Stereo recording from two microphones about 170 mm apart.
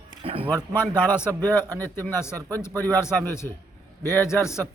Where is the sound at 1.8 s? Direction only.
10° left (ahead or behind).